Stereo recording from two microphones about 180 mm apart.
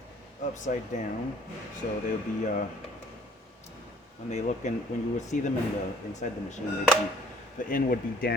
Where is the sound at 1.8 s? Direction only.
50° left (ahead or behind).